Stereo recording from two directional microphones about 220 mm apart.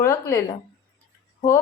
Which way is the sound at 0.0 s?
10° left (ahead or behind).